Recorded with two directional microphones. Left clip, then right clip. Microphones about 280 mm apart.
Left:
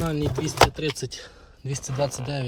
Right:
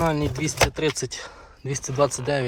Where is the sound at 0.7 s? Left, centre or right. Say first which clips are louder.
Right 4 dB; centre.